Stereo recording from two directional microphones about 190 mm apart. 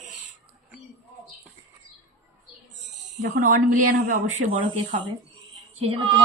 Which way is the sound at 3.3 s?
45° right (ahead or behind).